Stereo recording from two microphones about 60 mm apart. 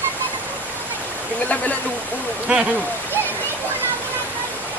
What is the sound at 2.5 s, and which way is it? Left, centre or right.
Speech, right.